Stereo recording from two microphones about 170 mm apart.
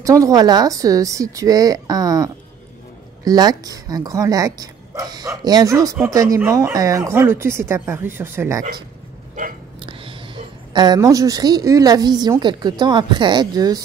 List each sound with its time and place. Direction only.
0.0 s speech: 20° right (ahead or behind)
9.8 s a woman's voice: 30° right (ahead or behind)